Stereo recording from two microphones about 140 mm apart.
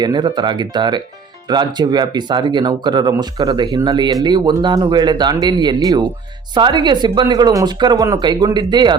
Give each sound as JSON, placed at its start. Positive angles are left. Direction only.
{"t": 0.0, "sound": "speech", "side_deg": -30}